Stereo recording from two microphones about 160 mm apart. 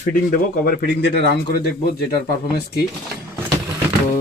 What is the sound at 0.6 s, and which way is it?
Speech, 80° left.